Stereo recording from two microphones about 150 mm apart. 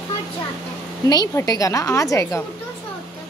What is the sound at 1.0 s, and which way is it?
A woman's voice, 25° left (ahead or behind).